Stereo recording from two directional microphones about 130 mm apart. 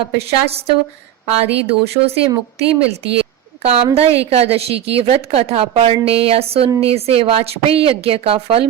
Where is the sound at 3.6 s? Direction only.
50° right (ahead or behind).